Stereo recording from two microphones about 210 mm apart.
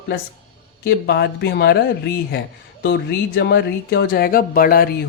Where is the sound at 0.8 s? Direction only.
50° left (ahead or behind).